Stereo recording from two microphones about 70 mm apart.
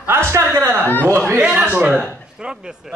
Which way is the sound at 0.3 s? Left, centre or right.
Right.